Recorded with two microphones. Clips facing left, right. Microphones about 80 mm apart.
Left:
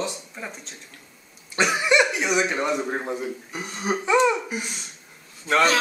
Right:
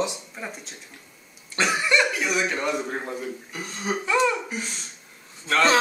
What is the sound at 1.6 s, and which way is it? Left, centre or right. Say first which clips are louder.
Speech: left 2 dB; centre.